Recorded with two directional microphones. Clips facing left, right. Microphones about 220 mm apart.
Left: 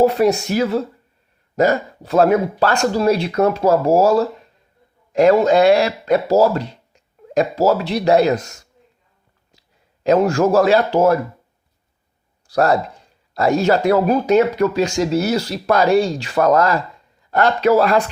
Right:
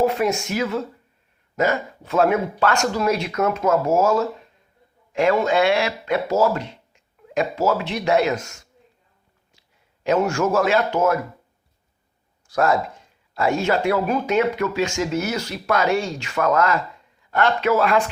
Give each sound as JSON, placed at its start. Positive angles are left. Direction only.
{"t": 0.0, "sound": "speech", "side_deg": 35}
{"t": 10.0, "sound": "speech", "side_deg": 35}
{"t": 12.5, "sound": "speech", "side_deg": 35}